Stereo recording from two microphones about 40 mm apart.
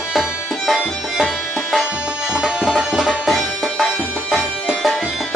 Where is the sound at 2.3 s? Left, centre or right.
Centre.